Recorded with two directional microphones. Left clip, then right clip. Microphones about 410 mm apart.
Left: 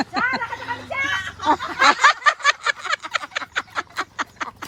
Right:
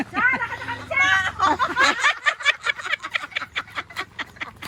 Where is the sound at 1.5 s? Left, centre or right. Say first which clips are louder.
Left 4 dB; left.